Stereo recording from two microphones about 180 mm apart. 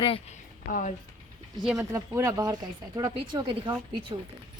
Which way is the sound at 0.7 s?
45° left (ahead or behind).